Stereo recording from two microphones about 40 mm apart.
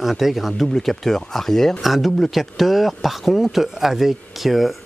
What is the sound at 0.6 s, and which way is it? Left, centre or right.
Speech, centre.